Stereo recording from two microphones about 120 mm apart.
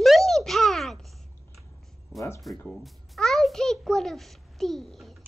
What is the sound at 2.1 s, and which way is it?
Music, 25° left (ahead or behind).